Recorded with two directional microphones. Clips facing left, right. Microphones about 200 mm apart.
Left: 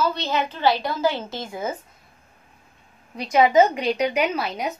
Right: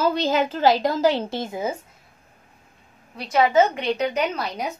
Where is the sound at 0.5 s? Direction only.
40° right (ahead or behind).